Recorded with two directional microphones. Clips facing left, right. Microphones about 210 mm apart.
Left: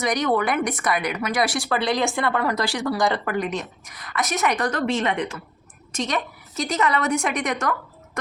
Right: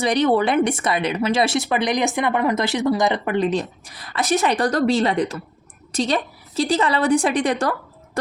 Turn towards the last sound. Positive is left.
turn(degrees=-30)  # may be behind; listen again after turning